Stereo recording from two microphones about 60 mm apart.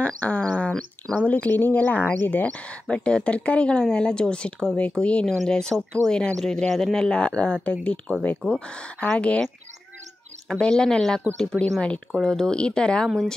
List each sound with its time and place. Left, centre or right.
0.0 s a sound: left
1.1 s speech: left
10.5 s speech: centre